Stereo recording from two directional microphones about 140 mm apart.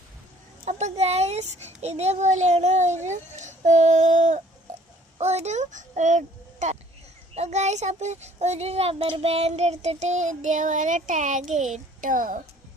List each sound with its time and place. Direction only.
0.6 s child singing: 55° right (ahead or behind)
5.1 s a child's voice: 50° right (ahead or behind)
7.3 s child singing: 50° right (ahead or behind); by 12.4 s 70° right (ahead or behind)